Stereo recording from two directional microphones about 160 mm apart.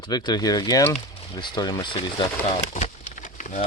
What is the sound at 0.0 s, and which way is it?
Speech, 25° left (ahead or behind).